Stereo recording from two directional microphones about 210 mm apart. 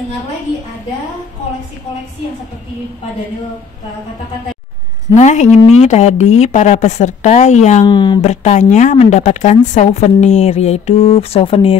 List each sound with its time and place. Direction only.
5.1 s speech: 35° left (ahead or behind)
7.8 s speech: 20° left (ahead or behind)
8.2 s speech: 35° left (ahead or behind)